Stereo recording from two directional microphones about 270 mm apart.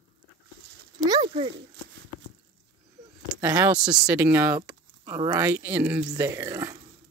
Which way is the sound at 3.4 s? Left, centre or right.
Centre.